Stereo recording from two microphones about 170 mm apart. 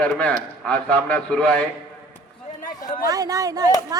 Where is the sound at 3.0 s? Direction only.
20° right (ahead or behind).